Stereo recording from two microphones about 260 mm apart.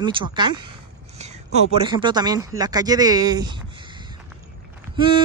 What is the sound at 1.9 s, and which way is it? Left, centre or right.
Speech, centre.